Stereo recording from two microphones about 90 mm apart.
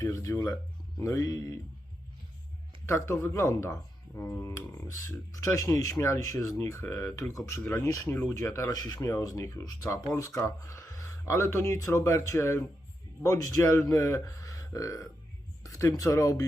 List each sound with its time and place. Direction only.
0.0 s speech: 35° left (ahead or behind)
2.8 s speech: 30° left (ahead or behind)